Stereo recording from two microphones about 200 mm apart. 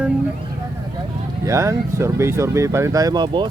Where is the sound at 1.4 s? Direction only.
15° right (ahead or behind).